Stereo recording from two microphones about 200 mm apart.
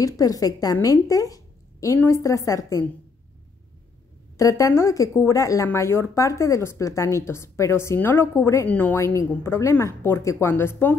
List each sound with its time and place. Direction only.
0.0 s speech: 20° left (ahead or behind)
4.4 s speech: 15° left (ahead or behind)